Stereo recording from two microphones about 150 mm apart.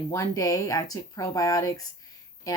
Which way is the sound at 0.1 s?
25° left (ahead or behind).